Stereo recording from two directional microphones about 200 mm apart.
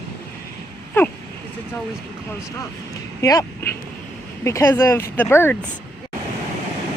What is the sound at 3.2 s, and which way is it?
Speech, 15° left (ahead or behind).